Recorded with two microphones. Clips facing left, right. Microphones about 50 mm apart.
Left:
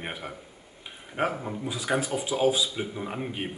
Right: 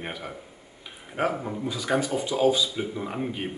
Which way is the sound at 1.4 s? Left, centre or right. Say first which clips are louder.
Right 2 dB; centre.